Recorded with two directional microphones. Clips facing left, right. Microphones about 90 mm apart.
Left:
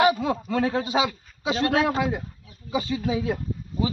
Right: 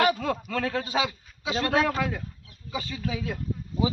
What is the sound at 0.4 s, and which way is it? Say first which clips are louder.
A man's voice: left 5 dB; 20° left (ahead or behind).